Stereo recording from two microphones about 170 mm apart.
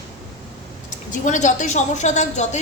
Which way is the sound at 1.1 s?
45° left (ahead or behind).